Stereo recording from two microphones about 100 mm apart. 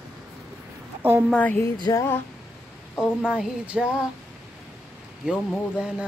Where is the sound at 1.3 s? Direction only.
15° left (ahead or behind).